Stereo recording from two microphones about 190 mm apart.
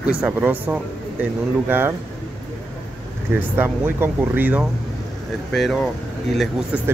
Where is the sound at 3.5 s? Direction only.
10° right (ahead or behind).